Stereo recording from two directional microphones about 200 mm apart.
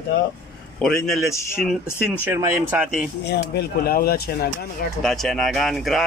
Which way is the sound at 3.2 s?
50° left (ahead or behind).